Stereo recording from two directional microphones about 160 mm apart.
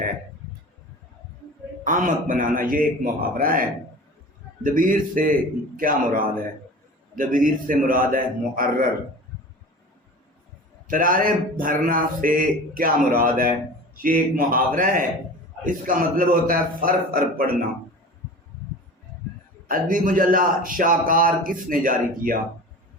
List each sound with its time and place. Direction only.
1.8 s a man's voice: 55° right (ahead or behind)
4.6 s a man's voice: 55° right (ahead or behind)
10.8 s a man's voice: 60° right (ahead or behind)
19.6 s a man's voice: 60° right (ahead or behind)